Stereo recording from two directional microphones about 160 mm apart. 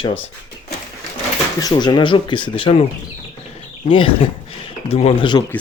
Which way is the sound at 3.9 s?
35° left (ahead or behind).